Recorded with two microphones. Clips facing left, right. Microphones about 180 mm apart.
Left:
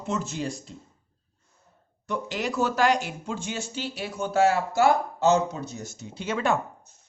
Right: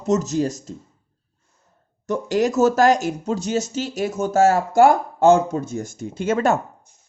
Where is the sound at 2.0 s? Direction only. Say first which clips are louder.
Right 10 dB; 45° right (ahead or behind).